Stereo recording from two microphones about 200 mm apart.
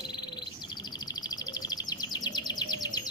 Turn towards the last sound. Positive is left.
turn(degrees=20)  # may be behind; listen again after turning